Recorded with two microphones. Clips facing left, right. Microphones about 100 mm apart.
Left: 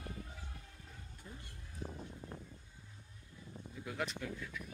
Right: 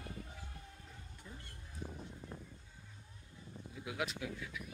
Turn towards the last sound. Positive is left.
turn(degrees=-5)  # may be behind; listen again after turning